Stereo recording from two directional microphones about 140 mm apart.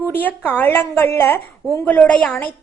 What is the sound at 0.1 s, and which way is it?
A woman's voice, 15° left (ahead or behind).